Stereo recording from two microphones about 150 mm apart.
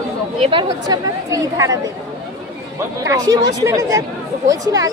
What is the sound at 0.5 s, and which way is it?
Speech, 25° right (ahead or behind).